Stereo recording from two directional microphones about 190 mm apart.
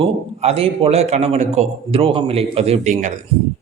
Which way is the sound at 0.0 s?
30° right (ahead or behind).